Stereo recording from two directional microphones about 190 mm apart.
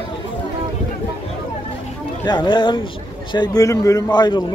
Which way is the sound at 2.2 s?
25° left (ahead or behind).